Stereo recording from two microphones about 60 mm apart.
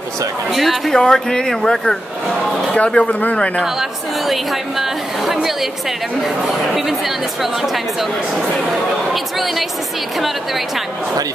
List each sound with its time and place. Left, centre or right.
0.5 s a woman's voice: centre
0.9 s speech: centre
2.7 s speech: centre
4.3 s a woman's voice: centre
9.1 s a woman's voice: centre